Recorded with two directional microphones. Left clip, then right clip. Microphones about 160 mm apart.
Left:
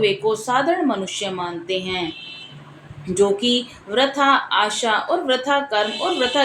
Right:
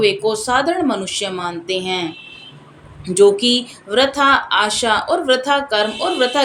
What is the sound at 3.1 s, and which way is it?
Speech, 35° right (ahead or behind).